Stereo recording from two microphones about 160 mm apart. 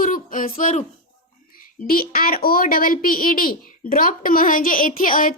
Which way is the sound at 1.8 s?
65° left (ahead or behind).